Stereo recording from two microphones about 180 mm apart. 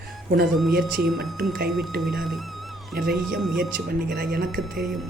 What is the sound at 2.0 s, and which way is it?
Music, centre (ahead or behind).